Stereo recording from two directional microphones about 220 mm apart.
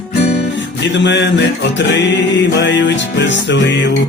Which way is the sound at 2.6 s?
55° left (ahead or behind).